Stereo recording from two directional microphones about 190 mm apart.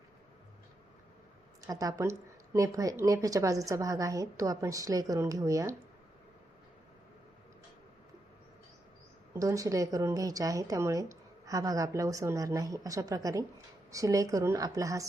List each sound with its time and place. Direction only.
1.6 s a woman's voice: 20° right (ahead or behind)
9.3 s a woman's voice: 15° right (ahead or behind)